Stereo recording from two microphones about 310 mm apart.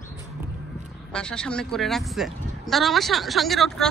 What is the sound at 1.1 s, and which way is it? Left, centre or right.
Speech, centre.